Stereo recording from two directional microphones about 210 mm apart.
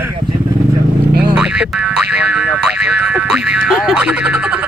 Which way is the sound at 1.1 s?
50° right (ahead or behind).